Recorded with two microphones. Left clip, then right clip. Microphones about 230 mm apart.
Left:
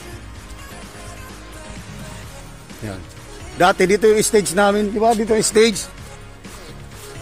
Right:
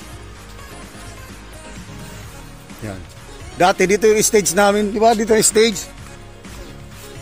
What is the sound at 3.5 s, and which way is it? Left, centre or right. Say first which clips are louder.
A man's voice: even; centre.